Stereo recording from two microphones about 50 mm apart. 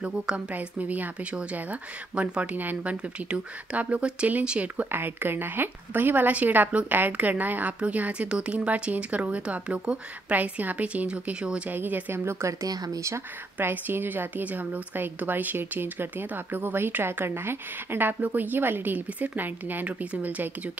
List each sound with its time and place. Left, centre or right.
0.0 s a woman's voice: right
4.9 s a woman's voice: right
10.3 s a woman's voice: right
11.7 s a woman's voice: right
12.3 s speech: right
13.6 s a woman's voice: right